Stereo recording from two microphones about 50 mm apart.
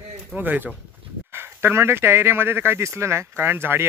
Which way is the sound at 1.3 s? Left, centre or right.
Right.